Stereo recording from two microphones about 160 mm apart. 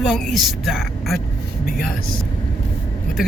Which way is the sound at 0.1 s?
Centre (ahead or behind).